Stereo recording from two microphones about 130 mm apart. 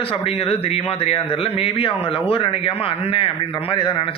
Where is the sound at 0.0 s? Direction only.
50° left (ahead or behind).